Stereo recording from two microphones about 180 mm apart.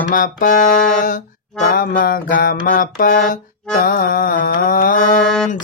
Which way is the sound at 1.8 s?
55° left (ahead or behind).